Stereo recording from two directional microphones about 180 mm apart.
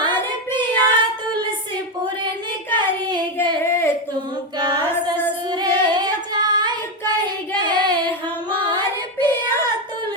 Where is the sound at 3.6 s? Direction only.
15° left (ahead or behind).